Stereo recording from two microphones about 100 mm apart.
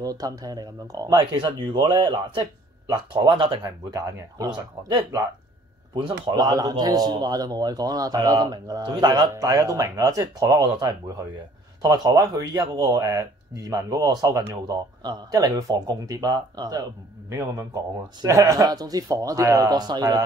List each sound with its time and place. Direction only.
0.0 s speech: 35° right (ahead or behind)
5.9 s speech: 60° right (ahead or behind)
6.3 s speech: 40° right (ahead or behind)
9.3 s speech: 30° right (ahead or behind)